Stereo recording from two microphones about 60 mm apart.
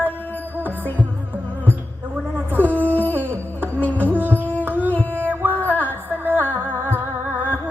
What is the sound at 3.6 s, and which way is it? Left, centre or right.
Music, left.